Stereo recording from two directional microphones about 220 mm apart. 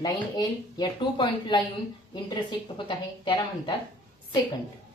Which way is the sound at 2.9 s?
20° left (ahead or behind).